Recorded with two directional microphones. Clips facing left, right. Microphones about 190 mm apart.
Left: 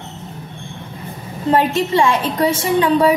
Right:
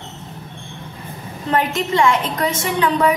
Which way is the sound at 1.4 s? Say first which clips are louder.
Left 4 dB; 25° left (ahead or behind).